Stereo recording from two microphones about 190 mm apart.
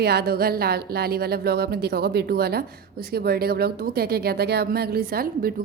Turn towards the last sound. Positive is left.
turn(degrees=-50)  # may be behind; listen again after turning